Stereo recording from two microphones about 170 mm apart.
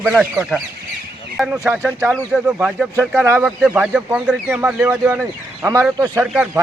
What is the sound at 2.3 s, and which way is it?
Speech, 5° right (ahead or behind).